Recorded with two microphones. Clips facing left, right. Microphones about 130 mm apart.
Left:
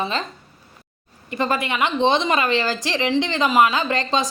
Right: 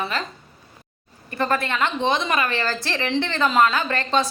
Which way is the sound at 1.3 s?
15° left (ahead or behind).